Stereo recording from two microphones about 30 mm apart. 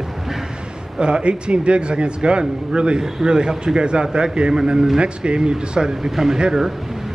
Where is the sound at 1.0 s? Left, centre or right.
Right.